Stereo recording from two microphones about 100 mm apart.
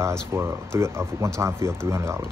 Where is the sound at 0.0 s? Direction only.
25° right (ahead or behind).